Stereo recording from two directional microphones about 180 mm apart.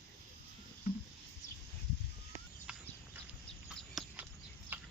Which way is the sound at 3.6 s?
Centre (ahead or behind).